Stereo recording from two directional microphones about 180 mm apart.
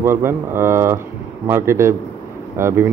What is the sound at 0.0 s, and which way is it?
A man's voice, 15° right (ahead or behind).